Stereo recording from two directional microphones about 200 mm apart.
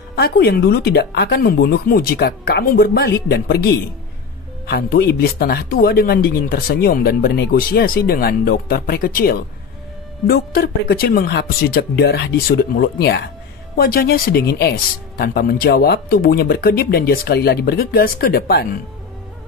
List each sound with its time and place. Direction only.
0.1 s speech: 55° left (ahead or behind)